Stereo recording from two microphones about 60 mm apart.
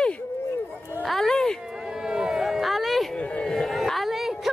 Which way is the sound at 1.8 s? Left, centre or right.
Centre.